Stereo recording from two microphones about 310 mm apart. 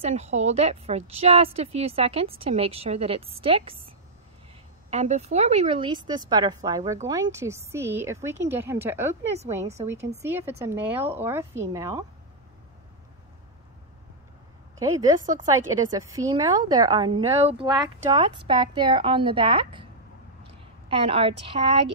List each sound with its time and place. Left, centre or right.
0.0 s a woman's voice: right
4.9 s speech: right
9.6 s a woman's voice: right
10.6 s speech: centre
14.8 s speech: centre
20.9 s speech: centre